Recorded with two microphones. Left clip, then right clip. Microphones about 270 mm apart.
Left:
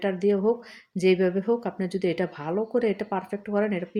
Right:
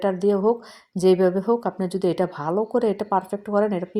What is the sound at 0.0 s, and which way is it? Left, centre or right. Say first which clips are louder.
Speech: right 3 dB; centre.